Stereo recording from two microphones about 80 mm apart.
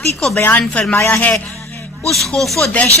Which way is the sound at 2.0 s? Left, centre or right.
Centre.